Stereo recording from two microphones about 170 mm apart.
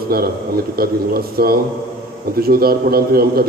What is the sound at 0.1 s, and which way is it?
A man's voice, 60° right (ahead or behind).